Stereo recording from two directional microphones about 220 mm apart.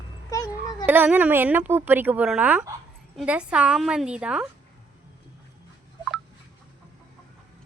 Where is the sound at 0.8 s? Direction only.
10° right (ahead or behind).